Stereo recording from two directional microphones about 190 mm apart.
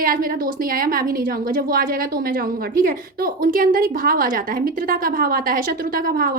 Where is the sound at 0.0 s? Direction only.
50° right (ahead or behind).